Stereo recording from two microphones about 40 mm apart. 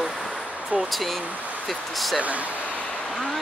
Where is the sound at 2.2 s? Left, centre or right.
Right.